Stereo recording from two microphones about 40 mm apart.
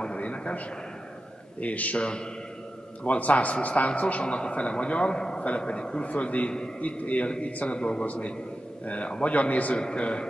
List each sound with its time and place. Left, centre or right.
0.0 s a sound: left
1.6 s a man's voice: left
2.0 s speech: left
3.0 s a man's voice: left
7.2 s speech: left
8.0 s a man's voice: left